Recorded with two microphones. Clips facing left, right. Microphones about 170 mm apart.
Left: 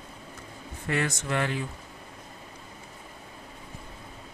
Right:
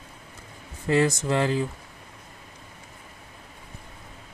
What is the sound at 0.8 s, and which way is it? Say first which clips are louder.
Speech: right 7 dB; 30° right (ahead or behind).